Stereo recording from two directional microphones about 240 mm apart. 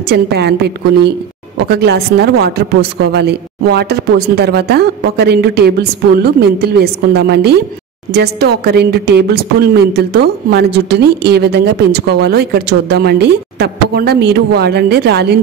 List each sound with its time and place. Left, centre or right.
0.1 s a woman's voice: right